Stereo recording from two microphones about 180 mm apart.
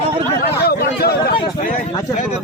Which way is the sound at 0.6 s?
60° left (ahead or behind).